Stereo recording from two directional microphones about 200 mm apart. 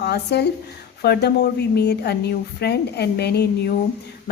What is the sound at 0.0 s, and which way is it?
A woman's voice, 55° left (ahead or behind).